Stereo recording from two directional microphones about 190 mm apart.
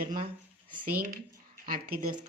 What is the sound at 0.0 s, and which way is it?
Speech, 45° right (ahead or behind).